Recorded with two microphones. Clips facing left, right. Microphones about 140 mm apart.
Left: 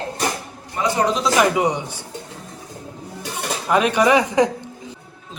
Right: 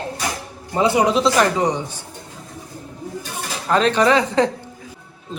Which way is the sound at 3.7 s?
10° left (ahead or behind).